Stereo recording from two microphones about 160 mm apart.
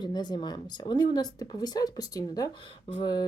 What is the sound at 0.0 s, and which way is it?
Speech, 25° left (ahead or behind).